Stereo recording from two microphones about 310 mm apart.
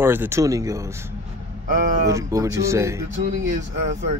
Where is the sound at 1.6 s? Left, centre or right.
Right.